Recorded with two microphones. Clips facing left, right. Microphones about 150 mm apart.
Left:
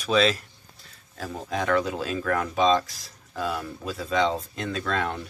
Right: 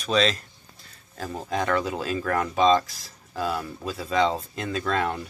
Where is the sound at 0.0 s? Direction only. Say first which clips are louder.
Left 1 dB; 10° left (ahead or behind).